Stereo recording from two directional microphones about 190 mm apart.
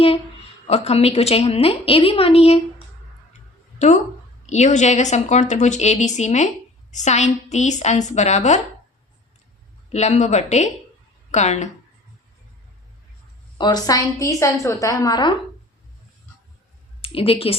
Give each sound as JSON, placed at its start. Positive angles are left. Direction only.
{"t": 0.7, "sound": "a woman's voice", "side_deg": 35}
{"t": 9.9, "sound": "a woman's voice", "side_deg": 35}
{"t": 13.6, "sound": "a woman's voice", "side_deg": 20}
{"t": 17.0, "sound": "speech", "side_deg": 30}